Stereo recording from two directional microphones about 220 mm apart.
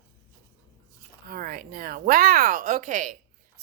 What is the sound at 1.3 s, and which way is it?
A woman's voice, 40° right (ahead or behind).